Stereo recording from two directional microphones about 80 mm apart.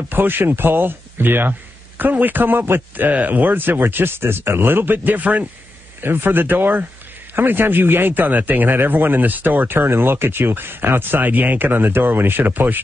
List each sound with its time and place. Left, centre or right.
0.1 s speech: right